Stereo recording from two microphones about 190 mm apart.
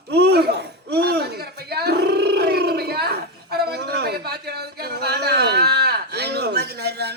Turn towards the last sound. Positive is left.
turn(degrees=-60)  # may be behind; listen again after turning